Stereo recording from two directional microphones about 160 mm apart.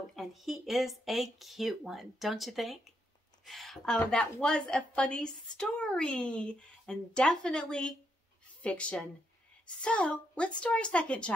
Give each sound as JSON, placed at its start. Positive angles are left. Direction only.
{"t": 0.1, "sound": "a woman's voice", "side_deg": 0}